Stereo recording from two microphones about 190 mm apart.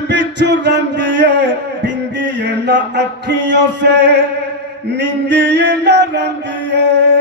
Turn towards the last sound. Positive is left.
turn(degrees=-70)  # may be behind; listen again after turning